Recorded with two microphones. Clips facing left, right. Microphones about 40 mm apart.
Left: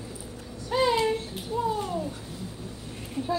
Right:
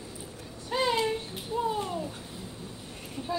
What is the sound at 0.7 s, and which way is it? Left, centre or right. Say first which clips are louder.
Speech: left 3 dB; centre.